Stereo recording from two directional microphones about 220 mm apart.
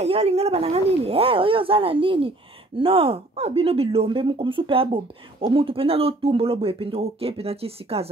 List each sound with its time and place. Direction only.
0.0 s speech: 30° right (ahead or behind)